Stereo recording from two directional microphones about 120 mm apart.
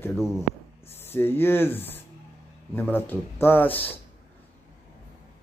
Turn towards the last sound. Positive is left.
turn(degrees=15)  # may be behind; listen again after turning